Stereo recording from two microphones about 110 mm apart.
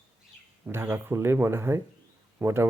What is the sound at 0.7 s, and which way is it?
Speech, 20° right (ahead or behind).